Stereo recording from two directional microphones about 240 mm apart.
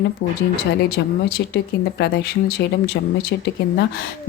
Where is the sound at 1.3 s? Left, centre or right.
Left.